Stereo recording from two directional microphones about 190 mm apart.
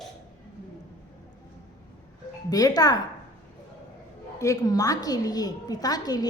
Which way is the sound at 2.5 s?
20° left (ahead or behind).